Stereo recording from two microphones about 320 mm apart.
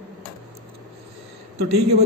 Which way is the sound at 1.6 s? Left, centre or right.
Right.